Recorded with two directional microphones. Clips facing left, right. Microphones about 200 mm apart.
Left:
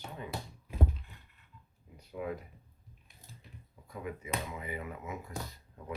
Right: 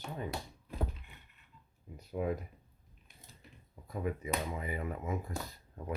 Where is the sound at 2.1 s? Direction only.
40° right (ahead or behind).